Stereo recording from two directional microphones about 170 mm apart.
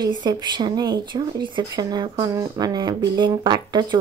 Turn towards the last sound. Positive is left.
turn(degrees=-25)  # may be behind; listen again after turning